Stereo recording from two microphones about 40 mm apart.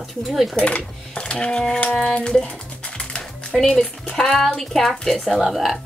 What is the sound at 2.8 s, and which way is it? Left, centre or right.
Music, left.